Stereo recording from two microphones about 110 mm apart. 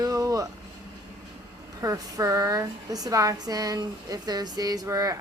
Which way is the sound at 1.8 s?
30° right (ahead or behind).